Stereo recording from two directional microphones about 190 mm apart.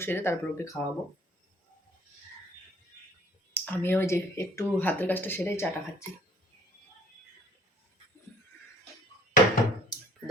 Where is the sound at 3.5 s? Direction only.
10° left (ahead or behind).